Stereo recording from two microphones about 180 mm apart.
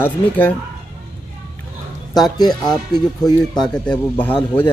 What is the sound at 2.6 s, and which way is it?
Speech, 25° left (ahead or behind).